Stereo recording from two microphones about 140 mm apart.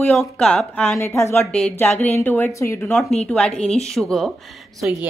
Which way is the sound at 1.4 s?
5° left (ahead or behind).